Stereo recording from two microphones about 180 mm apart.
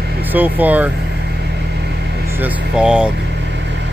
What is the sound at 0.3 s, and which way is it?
Speech, 10° right (ahead or behind).